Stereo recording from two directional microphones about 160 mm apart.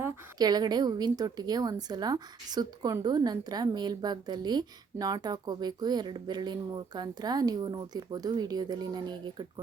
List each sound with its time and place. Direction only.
0.0 s a woman's voice: 25° right (ahead or behind)